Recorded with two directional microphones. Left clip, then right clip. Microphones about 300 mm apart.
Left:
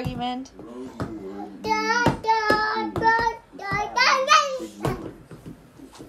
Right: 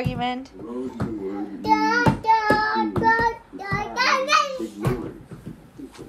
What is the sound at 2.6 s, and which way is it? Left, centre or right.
Child singing, centre.